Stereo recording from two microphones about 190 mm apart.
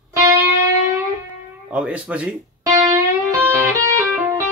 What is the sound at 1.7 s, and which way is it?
Speech, 5° right (ahead or behind).